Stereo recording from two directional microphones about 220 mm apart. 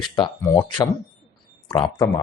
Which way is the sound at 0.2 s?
20° left (ahead or behind).